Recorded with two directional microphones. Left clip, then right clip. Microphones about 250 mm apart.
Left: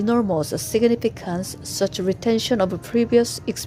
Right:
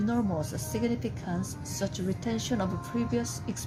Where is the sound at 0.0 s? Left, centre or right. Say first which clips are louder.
Left 10 dB; left.